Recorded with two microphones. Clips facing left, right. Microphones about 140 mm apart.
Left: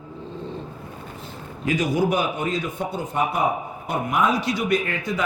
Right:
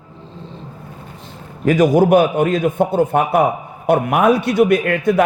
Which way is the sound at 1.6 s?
50° right (ahead or behind).